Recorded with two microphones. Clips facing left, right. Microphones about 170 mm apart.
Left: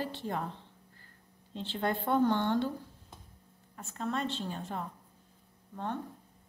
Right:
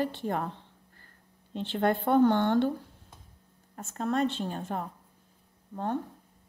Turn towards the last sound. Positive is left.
turn(degrees=-40)  # may be behind; listen again after turning